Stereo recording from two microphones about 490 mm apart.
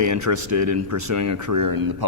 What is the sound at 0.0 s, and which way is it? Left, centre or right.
Speech, right.